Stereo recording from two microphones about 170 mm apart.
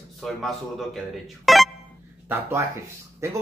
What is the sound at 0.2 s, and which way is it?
Speech, centre (ahead or behind).